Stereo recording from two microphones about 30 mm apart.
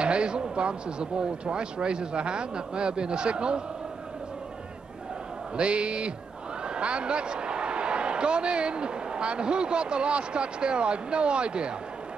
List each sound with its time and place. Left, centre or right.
0.0 s speech: right
5.6 s a man's voice: right